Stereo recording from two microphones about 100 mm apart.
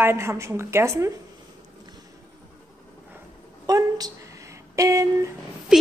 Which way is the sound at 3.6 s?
35° right (ahead or behind).